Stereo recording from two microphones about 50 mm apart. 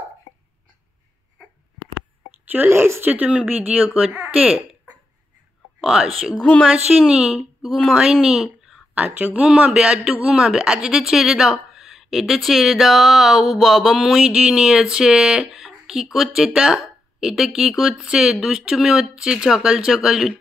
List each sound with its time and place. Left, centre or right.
2.4 s a sound: right
2.7 s speech: right
3.1 s a woman's voice: right
5.9 s a woman's voice: centre
8.9 s a woman's voice: right
9.4 s speech: centre